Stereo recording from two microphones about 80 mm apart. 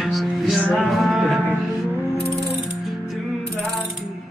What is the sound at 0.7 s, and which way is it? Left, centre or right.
Music, centre.